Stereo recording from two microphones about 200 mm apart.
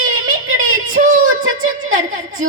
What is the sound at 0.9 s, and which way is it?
Speech, 40° right (ahead or behind).